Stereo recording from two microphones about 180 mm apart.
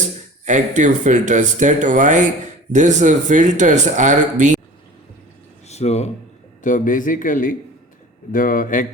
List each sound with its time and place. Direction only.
0.4 s speech: 45° right (ahead or behind)
5.6 s a man's voice: 35° left (ahead or behind)